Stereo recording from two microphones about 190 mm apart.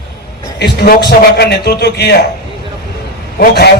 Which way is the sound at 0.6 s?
55° left (ahead or behind).